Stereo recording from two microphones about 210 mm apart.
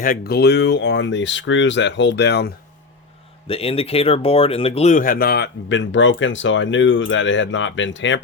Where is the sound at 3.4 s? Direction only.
25° left (ahead or behind).